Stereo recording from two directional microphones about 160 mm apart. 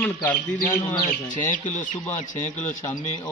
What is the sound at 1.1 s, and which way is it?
Speech, 55° left (ahead or behind).